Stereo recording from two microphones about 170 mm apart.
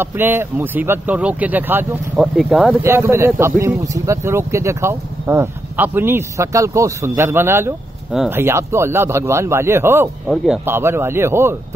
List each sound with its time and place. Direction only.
0.0 s speech: 15° right (ahead or behind)
2.8 s speech: 15° right (ahead or behind)
10.2 s speech: centre (ahead or behind)
10.6 s speech: 15° right (ahead or behind)